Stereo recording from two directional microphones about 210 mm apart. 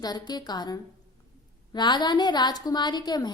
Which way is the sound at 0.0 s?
20° left (ahead or behind).